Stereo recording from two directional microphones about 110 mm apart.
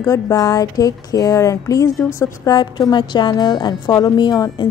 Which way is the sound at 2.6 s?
40° left (ahead or behind).